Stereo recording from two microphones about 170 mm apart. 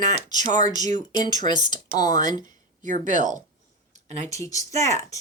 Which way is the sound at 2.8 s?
50° right (ahead or behind).